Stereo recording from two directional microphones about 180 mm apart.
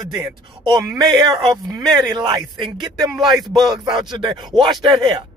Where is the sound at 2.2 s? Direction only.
25° right (ahead or behind).